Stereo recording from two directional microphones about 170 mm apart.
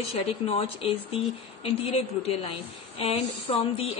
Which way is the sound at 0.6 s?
35° left (ahead or behind).